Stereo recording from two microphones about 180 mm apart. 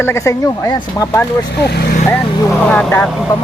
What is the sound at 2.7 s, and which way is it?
Speech, 10° left (ahead or behind).